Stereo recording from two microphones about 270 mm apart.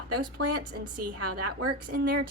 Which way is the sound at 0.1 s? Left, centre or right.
Right.